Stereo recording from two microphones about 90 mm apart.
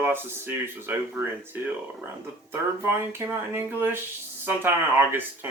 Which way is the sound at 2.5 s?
25° right (ahead or behind).